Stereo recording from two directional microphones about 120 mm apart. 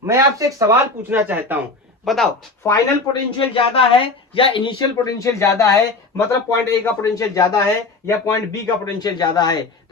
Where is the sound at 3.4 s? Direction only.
50° left (ahead or behind); by 5.7 s 25° left (ahead or behind).